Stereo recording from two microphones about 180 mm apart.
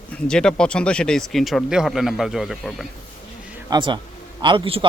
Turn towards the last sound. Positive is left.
turn(degrees=-30)  # may be behind; listen again after turning